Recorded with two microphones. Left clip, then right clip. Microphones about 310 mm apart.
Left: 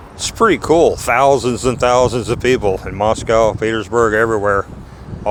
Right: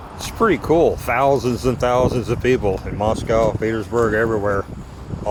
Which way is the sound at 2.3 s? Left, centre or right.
Left.